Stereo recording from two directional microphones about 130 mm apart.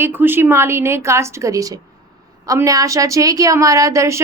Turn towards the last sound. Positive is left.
turn(degrees=-25)  # may be behind; listen again after turning